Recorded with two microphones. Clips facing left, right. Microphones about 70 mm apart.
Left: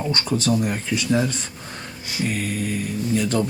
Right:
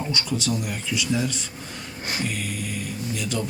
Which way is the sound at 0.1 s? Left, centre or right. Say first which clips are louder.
Left 7 dB; left.